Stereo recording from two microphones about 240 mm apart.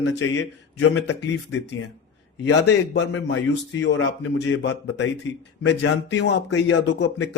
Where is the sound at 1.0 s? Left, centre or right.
Left.